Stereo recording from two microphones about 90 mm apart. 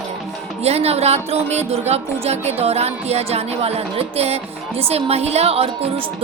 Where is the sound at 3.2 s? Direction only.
90° right.